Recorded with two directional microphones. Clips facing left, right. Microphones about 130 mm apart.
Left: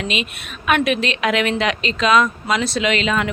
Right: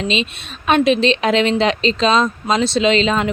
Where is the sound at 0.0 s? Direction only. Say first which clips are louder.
Right 4 dB; 25° right (ahead or behind).